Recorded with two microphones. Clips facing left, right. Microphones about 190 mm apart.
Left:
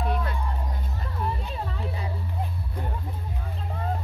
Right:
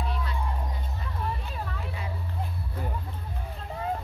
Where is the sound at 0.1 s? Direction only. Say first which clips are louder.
Left 5 dB; 55° left (ahead or behind).